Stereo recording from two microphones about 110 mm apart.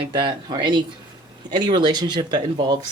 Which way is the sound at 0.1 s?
45° right (ahead or behind).